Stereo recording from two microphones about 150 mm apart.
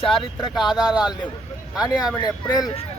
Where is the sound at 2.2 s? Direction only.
25° left (ahead or behind).